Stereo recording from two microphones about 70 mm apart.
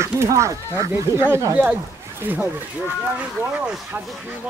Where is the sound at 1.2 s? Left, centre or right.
Right.